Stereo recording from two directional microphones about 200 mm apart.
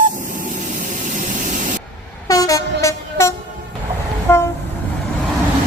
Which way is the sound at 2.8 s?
15° left (ahead or behind).